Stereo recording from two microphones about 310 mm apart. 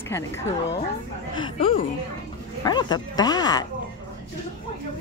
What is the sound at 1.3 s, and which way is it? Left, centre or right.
Speech, centre.